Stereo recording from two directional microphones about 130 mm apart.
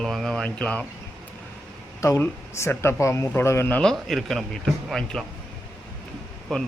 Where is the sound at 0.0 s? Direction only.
5° left (ahead or behind).